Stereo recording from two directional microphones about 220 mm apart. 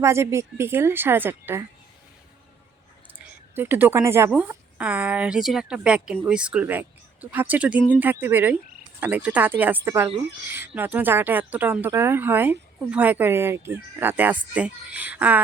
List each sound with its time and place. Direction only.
0.0 s speech: 10° right (ahead or behind)
3.5 s a woman's voice: 10° right (ahead or behind)